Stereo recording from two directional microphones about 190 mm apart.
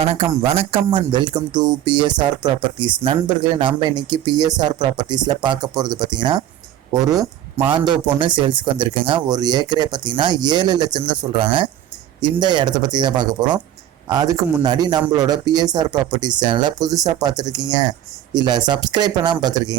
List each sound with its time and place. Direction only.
0.0 s speech: 30° right (ahead or behind)